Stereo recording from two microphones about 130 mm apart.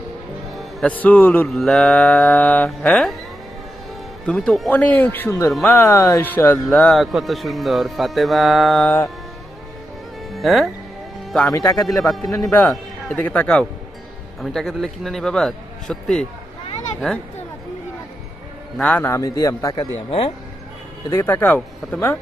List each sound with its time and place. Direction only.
0.5 s music: centre (ahead or behind)
0.9 s music: 10° left (ahead or behind)
1.5 s music: 5° left (ahead or behind)
4.3 s music: 5° left (ahead or behind)
5.5 s speech: centre (ahead or behind)
5.7 s music: 15° left (ahead or behind)
6.7 s speech: 5° left (ahead or behind)
10.3 s speech: centre (ahead or behind)
18.8 s a man's voice: 10° left (ahead or behind)
20.1 s speech: 45° left (ahead or behind)
21.1 s music: 20° left (ahead or behind)